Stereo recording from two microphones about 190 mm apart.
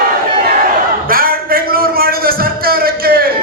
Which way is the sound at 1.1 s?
50° right (ahead or behind).